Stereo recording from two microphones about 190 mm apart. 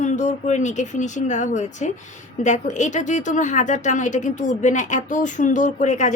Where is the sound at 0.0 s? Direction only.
40° left (ahead or behind).